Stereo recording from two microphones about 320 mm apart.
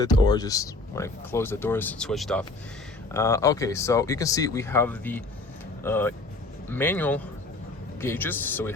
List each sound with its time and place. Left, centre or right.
0.0 s speech: centre